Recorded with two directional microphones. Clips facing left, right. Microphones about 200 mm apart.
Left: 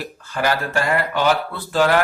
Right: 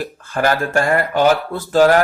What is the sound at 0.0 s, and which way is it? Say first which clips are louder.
Speech: right 4 dB; 50° right (ahead or behind).